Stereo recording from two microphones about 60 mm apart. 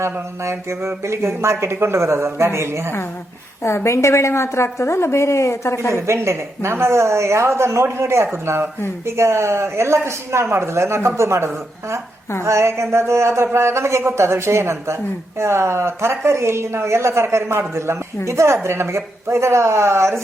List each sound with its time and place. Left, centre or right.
0.0 s speech: right
3.6 s a woman's voice: left
5.9 s speech: right